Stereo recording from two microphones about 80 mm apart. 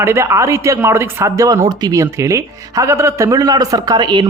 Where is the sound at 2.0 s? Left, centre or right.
Right.